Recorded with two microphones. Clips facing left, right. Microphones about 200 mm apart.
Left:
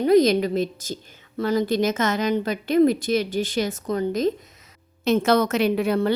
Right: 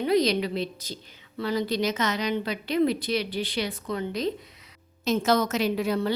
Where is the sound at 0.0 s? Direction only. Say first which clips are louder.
Left 6 dB; 45° left (ahead or behind).